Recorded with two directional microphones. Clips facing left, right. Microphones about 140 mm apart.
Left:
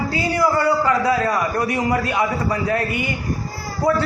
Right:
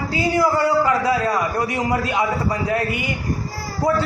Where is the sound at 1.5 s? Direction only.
20° right (ahead or behind).